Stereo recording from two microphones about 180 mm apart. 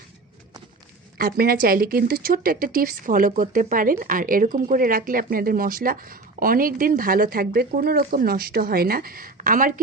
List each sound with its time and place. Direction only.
1.2 s speech: 55° right (ahead or behind)